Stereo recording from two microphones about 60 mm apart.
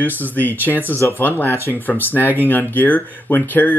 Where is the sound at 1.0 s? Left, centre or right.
Left.